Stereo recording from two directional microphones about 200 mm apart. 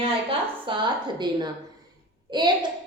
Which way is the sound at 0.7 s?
25° right (ahead or behind).